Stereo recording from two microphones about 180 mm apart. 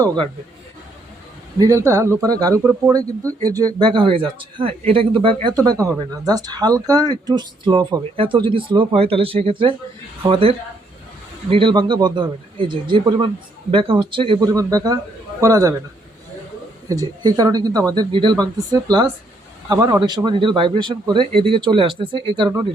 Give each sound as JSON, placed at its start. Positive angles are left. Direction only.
{"t": 1.5, "sound": "speech", "side_deg": -15}
{"t": 16.9, "sound": "speech", "side_deg": -20}